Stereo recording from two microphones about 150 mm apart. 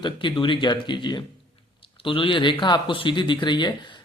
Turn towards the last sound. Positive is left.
turn(degrees=30)  # may be behind; listen again after turning